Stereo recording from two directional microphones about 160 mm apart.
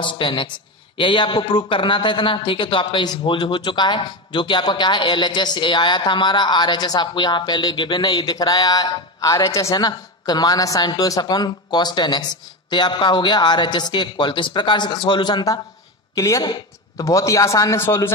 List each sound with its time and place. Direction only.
0.0 s a woman's voice: 30° left (ahead or behind); by 18.1 s 15° left (ahead or behind)